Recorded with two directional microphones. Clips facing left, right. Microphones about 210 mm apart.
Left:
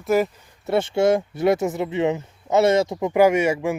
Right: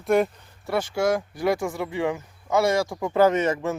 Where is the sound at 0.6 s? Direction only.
25° left (ahead or behind).